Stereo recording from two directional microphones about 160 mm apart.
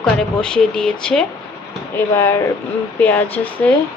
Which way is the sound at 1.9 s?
15° left (ahead or behind).